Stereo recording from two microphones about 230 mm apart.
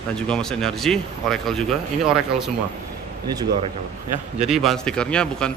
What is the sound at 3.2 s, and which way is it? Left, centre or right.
Speech, centre.